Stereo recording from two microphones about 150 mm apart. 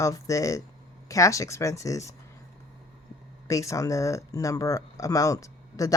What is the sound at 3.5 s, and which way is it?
Speech, 20° left (ahead or behind).